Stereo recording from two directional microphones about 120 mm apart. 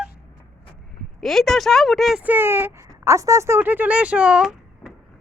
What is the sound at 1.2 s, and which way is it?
Speech, centre (ahead or behind).